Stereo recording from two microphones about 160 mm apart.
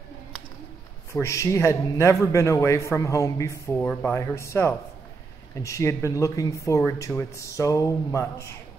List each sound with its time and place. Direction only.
1.1 s speech: 20° left (ahead or behind)